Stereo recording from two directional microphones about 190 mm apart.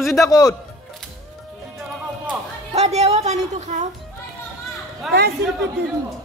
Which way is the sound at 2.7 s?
35° right (ahead or behind).